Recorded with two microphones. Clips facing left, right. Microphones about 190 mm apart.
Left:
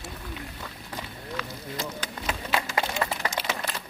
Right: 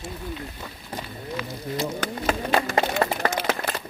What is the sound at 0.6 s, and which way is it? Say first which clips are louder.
Run: right 3 dB; 15° right (ahead or behind).